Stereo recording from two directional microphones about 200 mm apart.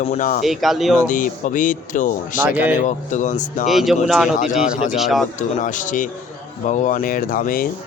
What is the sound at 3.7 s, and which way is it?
Speech, centre (ahead or behind).